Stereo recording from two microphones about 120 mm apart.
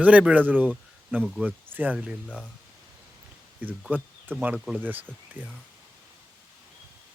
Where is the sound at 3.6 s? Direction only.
15° right (ahead or behind).